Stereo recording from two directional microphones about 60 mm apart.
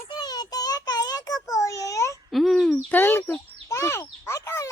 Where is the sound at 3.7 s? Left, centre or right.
Left.